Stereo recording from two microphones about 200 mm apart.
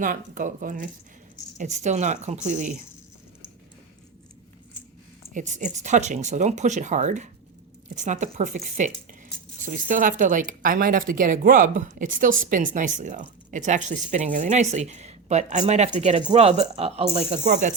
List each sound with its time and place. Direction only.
0.0 s speech: 40° right (ahead or behind)
5.3 s speech: 40° right (ahead or behind)